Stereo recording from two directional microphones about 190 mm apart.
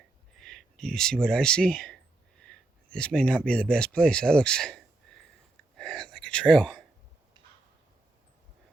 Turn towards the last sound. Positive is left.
turn(degrees=5)  # may be behind; listen again after turning